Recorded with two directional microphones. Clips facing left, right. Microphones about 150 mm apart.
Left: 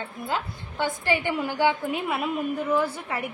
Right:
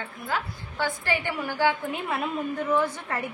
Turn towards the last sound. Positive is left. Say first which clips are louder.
# even
turn(degrees=10)  # may be behind; listen again after turning